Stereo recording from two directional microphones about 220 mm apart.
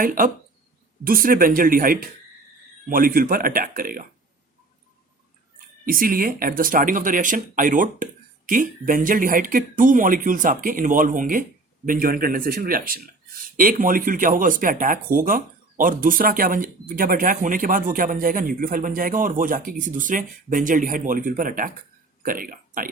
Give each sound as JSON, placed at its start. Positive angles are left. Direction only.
{"t": 0.0, "sound": "speech", "side_deg": -40}
{"t": 5.8, "sound": "speech", "side_deg": -40}